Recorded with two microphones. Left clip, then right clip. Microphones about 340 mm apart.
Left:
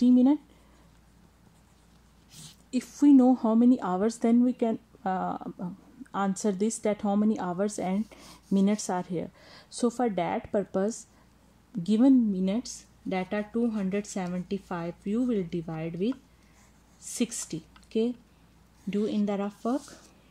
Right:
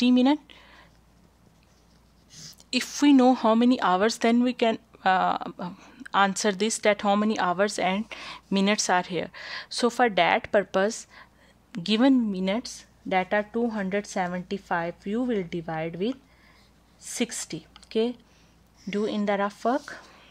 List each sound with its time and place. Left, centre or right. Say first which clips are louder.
0.0 s speech: right 1 dB; right
2.8 s speech: right 1 dB; right
5.3 s speech: right 7 dB; right
6.1 s speech: right 7 dB; right